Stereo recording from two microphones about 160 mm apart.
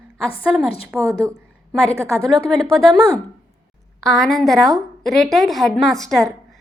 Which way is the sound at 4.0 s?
5° left (ahead or behind).